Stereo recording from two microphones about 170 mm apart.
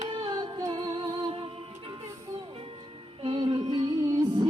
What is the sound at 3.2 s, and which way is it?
Music, 30° right (ahead or behind).